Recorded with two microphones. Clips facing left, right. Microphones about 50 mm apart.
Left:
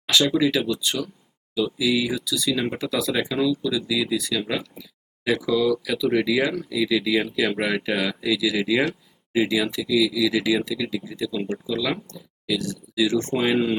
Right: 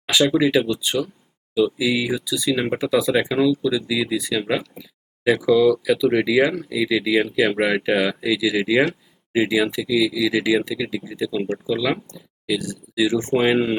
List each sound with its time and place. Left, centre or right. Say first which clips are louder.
0.3 s speech: right 3 dB; centre
1.0 s speech: right 4 dB; right